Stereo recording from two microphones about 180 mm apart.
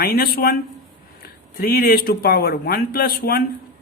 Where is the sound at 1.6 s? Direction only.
55° left (ahead or behind).